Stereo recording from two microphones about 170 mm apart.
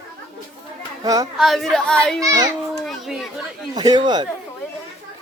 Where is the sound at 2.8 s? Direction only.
Centre (ahead or behind).